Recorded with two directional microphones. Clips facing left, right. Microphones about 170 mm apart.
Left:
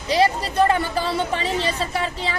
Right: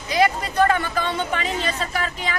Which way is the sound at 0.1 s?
30° left (ahead or behind).